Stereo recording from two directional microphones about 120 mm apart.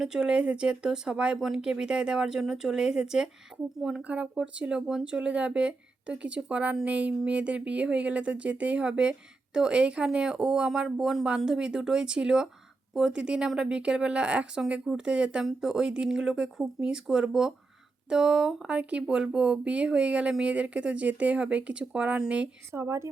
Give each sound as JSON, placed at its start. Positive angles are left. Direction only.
{"t": 0.0, "sound": "speech", "side_deg": -5}
{"t": 22.7, "sound": "speech", "side_deg": -25}